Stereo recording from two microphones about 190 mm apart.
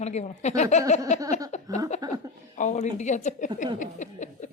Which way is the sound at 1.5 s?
35° left (ahead or behind).